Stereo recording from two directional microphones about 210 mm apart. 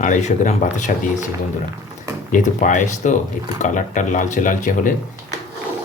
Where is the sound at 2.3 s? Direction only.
35° left (ahead or behind).